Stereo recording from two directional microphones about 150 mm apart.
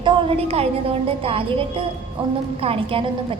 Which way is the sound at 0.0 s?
40° right (ahead or behind).